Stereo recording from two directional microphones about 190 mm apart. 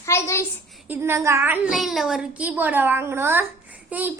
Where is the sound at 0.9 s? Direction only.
15° right (ahead or behind).